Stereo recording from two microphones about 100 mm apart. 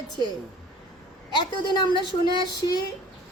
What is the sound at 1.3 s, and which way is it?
Speech, 50° left (ahead or behind).